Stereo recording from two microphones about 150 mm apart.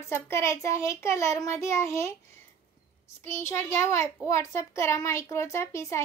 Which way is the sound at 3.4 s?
15° left (ahead or behind).